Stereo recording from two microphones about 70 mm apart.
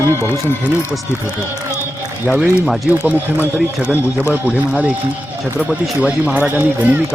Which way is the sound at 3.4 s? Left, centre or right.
Left.